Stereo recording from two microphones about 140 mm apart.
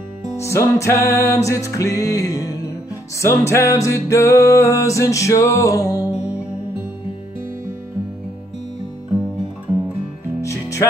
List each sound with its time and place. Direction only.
0.4 s music: 20° left (ahead or behind)
10.4 s music: 20° left (ahead or behind)